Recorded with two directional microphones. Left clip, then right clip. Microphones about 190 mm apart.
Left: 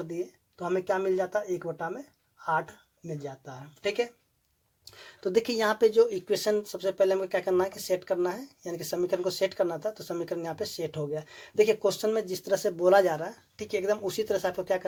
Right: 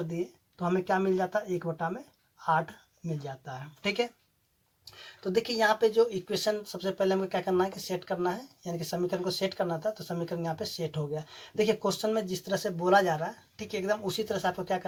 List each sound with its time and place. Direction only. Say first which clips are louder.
0.6 s speech: even; 50° left (ahead or behind)
3.2 s speech: even; 45° left (ahead or behind)